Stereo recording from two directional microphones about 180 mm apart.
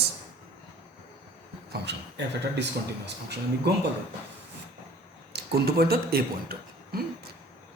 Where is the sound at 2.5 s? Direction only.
70° right (ahead or behind).